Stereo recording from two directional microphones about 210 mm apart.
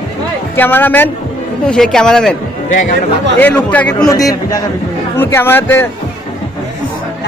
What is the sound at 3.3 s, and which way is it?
Speech, 10° left (ahead or behind).